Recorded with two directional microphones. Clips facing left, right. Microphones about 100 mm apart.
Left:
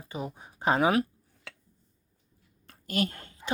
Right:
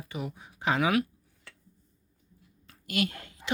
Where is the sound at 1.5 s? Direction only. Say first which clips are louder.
Left 6 dB; 90° left.